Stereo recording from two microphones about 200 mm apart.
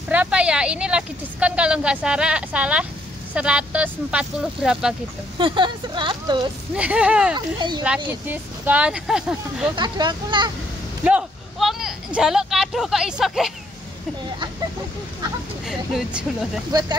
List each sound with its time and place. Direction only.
0.1 s a woman's voice: 5° right (ahead or behind)
5.4 s speech: 25° right (ahead or behind)
6.7 s a woman's voice: 5° right (ahead or behind)
7.3 s speech: 20° right (ahead or behind)
8.3 s a woman's voice: 5° right (ahead or behind)
9.8 s speech: 20° right (ahead or behind)
11.1 s speech: 5° right (ahead or behind)
15.6 s a woman's voice: centre (ahead or behind)